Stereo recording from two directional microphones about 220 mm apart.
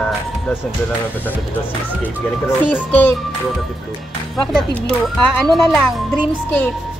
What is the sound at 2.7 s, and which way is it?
Music, 10° left (ahead or behind).